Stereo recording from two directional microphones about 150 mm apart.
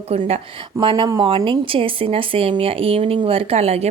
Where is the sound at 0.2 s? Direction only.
35° right (ahead or behind).